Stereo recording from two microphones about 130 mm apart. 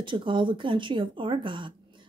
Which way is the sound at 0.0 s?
40° right (ahead or behind).